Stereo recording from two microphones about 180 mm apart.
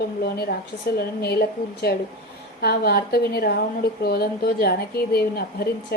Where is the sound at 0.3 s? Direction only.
60° left (ahead or behind).